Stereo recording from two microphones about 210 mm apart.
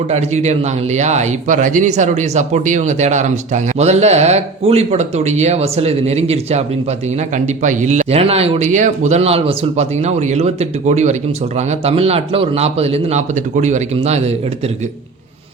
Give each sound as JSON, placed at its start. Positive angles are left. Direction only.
{"t": 0.1, "sound": "speech", "side_deg": -30}